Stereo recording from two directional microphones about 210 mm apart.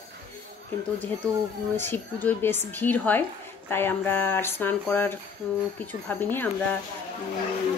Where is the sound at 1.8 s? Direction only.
10° left (ahead or behind).